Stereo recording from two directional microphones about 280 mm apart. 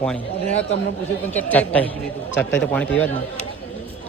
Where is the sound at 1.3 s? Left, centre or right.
Centre.